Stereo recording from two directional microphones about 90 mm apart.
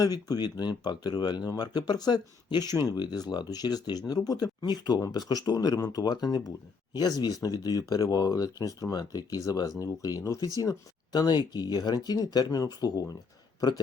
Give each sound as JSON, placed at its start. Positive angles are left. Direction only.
{"t": 0.0, "sound": "speech", "side_deg": 45}